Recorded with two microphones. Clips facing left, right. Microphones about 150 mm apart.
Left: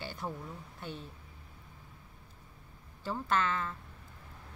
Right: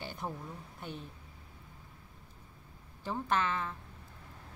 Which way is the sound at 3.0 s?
10° right (ahead or behind).